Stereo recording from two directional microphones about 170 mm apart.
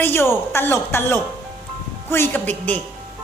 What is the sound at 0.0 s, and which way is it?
A woman's voice, 15° left (ahead or behind).